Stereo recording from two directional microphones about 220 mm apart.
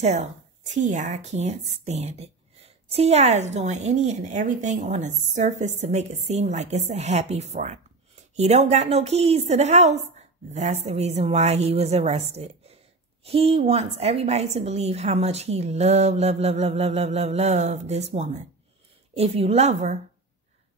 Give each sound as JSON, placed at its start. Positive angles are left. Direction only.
{"t": 0.0, "sound": "a woman's voice", "side_deg": -30}